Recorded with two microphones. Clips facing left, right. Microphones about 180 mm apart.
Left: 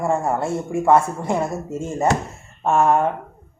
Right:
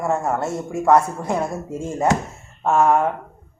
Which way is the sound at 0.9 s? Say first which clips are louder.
Even; centre (ahead or behind).